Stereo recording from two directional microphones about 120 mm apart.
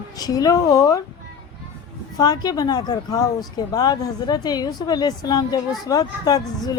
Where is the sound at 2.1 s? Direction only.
35° left (ahead or behind).